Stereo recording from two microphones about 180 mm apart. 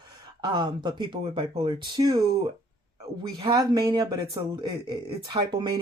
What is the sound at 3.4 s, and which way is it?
Speech, 20° right (ahead or behind).